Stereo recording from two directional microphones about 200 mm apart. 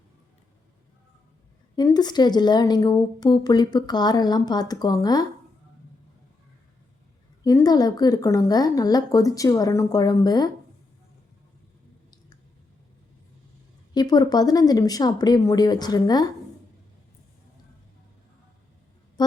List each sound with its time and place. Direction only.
1.7 s a woman's voice: 20° left (ahead or behind)
7.4 s a woman's voice: 20° left (ahead or behind)
13.9 s a woman's voice: 20° left (ahead or behind)